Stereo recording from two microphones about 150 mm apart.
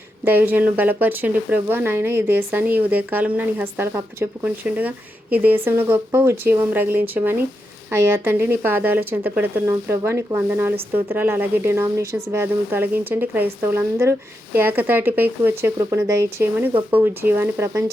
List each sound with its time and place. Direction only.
0.3 s speech: 10° right (ahead or behind)